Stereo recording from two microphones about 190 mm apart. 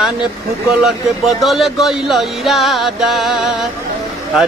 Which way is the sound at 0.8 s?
Centre (ahead or behind).